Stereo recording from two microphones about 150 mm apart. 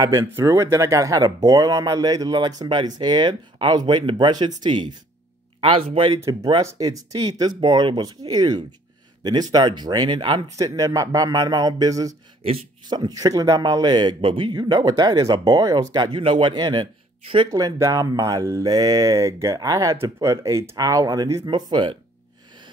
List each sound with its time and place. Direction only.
0.0 s a man's voice: 20° right (ahead or behind); by 6.2 s 35° right (ahead or behind)
6.2 s a man's voice: 25° right (ahead or behind)
12.4 s a man's voice: 35° right (ahead or behind)
17.5 s a man's voice: 20° right (ahead or behind)